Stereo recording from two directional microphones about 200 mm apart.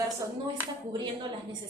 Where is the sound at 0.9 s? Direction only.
25° right (ahead or behind).